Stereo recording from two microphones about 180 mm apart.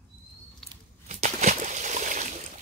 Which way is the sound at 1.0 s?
40° right (ahead or behind).